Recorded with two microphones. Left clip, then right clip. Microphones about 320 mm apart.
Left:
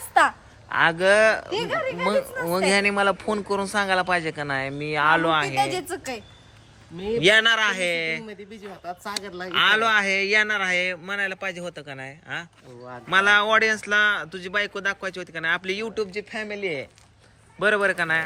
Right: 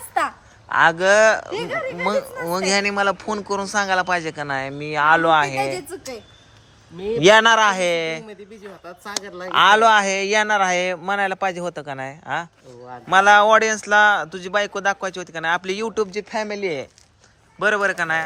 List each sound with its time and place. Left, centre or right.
0.1 s speech: centre
5.5 s a man's voice: centre
7.0 s speech: centre
8.3 s speech: centre
17.6 s a man's voice: centre